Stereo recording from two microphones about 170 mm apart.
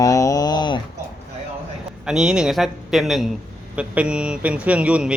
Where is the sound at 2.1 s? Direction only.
5° right (ahead or behind).